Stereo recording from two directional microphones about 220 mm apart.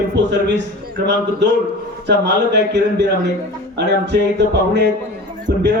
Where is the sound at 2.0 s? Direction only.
50° right (ahead or behind).